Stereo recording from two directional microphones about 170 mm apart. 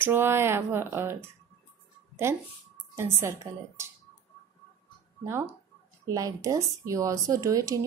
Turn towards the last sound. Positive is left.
turn(degrees=-20)  # may be behind; listen again after turning